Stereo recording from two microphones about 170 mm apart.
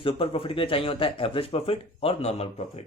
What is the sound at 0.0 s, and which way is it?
Speech, 30° left (ahead or behind).